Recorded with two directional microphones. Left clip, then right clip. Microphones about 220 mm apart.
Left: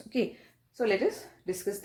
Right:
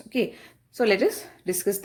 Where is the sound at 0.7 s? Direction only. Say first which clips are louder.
Right 6 dB; 40° right (ahead or behind).